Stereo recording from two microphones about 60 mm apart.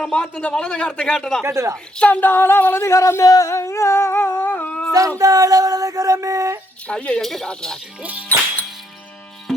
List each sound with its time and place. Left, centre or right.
0.0 s a man's voice: centre
1.5 s speech: right
2.0 s speech: left
2.3 s singing: left
2.9 s a sound: left
4.9 s a sound: right
6.8 s speech: left
7.2 s a man's voice: centre